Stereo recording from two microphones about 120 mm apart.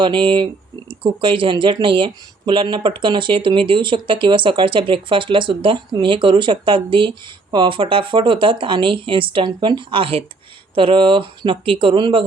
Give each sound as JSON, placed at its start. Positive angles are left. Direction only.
{"t": 0.0, "sound": "speech", "side_deg": -45}